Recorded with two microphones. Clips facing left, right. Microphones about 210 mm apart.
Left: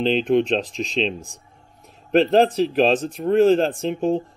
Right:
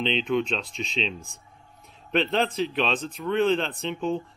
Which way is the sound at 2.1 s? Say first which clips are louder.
Left 8 dB; 40° left (ahead or behind).